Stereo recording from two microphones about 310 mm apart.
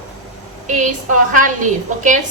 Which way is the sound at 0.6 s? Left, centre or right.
Right.